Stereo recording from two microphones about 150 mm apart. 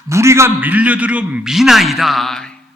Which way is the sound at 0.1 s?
20° right (ahead or behind).